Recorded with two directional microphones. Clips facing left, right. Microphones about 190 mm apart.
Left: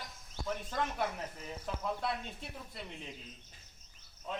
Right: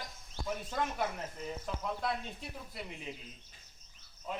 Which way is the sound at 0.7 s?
Centre (ahead or behind).